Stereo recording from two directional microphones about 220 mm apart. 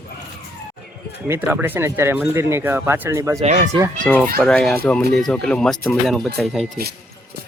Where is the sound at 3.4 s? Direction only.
30° right (ahead or behind).